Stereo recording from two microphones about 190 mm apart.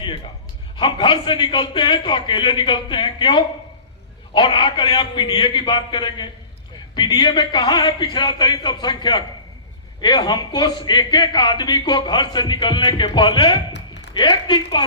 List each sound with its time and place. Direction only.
0.8 s a man's voice: 25° left (ahead or behind)